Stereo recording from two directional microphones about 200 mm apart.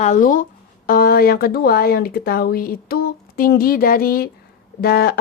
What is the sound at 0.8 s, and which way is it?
A woman's voice, 45° left (ahead or behind).